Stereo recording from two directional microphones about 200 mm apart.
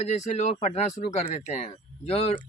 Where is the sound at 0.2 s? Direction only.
35° left (ahead or behind).